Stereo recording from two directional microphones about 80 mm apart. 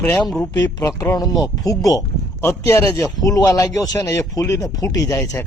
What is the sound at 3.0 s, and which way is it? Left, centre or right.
Speech, left.